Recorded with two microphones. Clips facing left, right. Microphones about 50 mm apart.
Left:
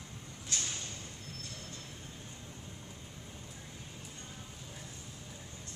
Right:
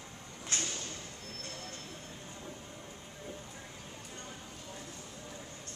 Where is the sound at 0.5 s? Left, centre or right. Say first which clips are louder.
Right 2 dB; right.